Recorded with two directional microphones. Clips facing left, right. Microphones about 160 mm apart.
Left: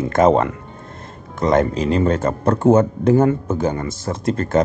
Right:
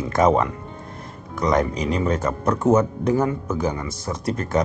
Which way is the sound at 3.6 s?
50° left (ahead or behind).